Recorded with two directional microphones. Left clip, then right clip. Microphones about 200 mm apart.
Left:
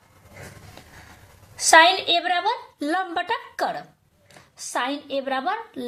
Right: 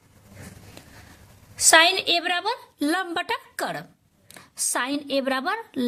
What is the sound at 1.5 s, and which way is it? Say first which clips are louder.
A woman's voice: left 2 dB; 40° right (ahead or behind).